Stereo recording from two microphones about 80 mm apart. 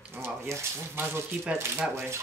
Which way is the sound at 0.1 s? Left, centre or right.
Right.